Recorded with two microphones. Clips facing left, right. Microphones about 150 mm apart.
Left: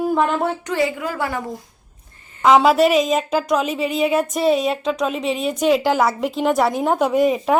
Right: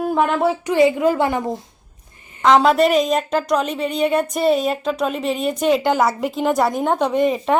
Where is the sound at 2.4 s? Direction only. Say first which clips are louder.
Even; 5° left (ahead or behind).